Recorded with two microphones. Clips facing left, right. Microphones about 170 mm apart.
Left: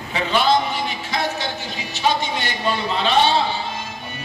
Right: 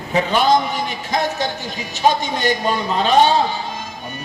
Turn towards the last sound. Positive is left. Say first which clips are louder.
# right 3 dB
turn(degrees=-45)  # may be behind; listen again after turning